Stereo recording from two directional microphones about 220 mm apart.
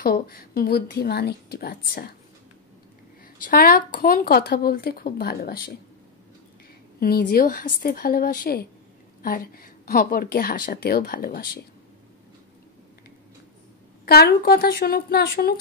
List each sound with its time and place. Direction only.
0.0 s a woman's voice: 45° left (ahead or behind)
3.4 s a woman's voice: 40° left (ahead or behind)
7.0 s a woman's voice: 45° left (ahead or behind)
14.0 s a woman's voice: 45° left (ahead or behind)